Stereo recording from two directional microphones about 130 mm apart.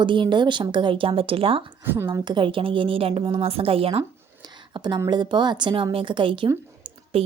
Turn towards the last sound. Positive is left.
turn(degrees=-50)  # may be behind; listen again after turning